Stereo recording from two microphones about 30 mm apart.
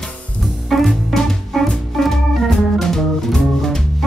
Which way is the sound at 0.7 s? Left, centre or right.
Centre.